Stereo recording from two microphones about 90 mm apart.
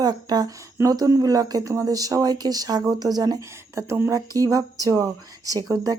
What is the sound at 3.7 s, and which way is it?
Speech, 30° right (ahead or behind).